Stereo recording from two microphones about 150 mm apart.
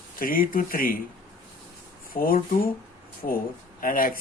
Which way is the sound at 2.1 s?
75° left (ahead or behind).